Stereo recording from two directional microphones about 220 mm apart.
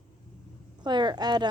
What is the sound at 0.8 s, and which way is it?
Speech, 20° right (ahead or behind).